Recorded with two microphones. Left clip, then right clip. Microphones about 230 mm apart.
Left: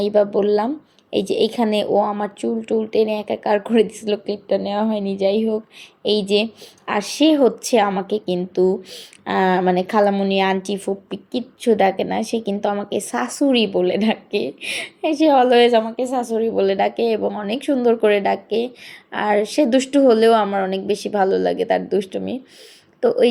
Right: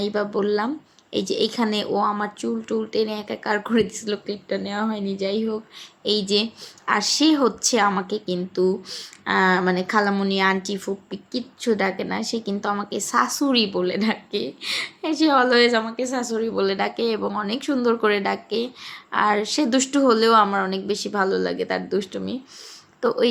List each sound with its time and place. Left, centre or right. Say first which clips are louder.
0.0 s a woman's voice: left 7 dB; centre
12.2 s speech: left 4 dB; right
12.5 s a woman's voice: left 4 dB; centre